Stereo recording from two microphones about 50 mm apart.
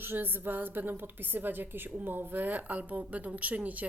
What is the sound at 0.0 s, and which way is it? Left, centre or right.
A woman's voice, right.